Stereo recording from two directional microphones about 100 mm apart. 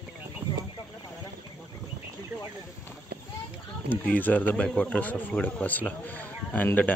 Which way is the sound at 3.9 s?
15° left (ahead or behind).